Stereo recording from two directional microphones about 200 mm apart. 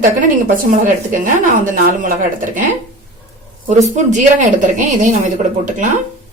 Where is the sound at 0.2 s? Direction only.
40° right (ahead or behind).